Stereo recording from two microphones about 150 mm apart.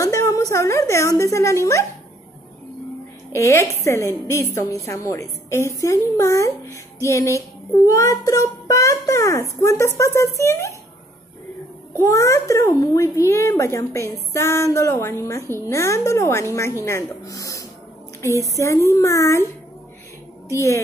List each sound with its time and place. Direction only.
0.0 s a woman's voice: 20° left (ahead or behind)
3.3 s a woman's voice: 20° left (ahead or behind)
12.0 s a woman's voice: 20° left (ahead or behind)
20.4 s a woman's voice: 20° left (ahead or behind)